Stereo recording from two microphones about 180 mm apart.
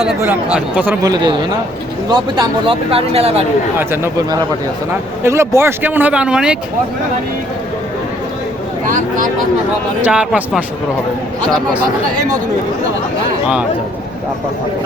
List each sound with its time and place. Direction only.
0.5 s speech: 10° right (ahead or behind)
1.0 s speech: 25° right (ahead or behind)
3.8 s speech: 15° right (ahead or behind)
8.9 s speech: 50° right (ahead or behind)
10.0 s speech: 10° right (ahead or behind)